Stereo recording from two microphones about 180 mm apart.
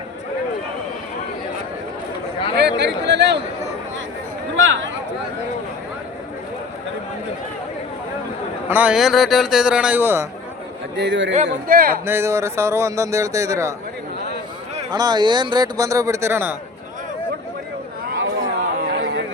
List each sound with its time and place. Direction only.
2.6 s speech: 70° right (ahead or behind)
4.5 s speech: 90° right
8.7 s a man's voice: 5° right (ahead or behind)
10.9 s a man's voice: 80° right
11.7 s speech: 55° right (ahead or behind)
12.0 s a man's voice: 15° right (ahead or behind)
14.9 s speech: 25° right (ahead or behind)
18.3 s chatter: 75° right (ahead or behind)